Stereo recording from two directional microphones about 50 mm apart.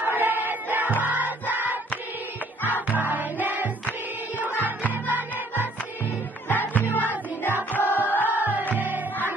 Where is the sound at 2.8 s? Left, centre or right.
Right.